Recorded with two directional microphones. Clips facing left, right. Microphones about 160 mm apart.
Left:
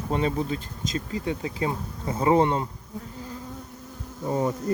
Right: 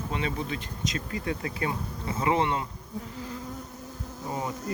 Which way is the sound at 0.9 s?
30° left (ahead or behind).